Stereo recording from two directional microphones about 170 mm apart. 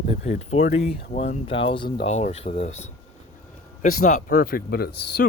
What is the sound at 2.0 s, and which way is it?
Speech, 40° left (ahead or behind).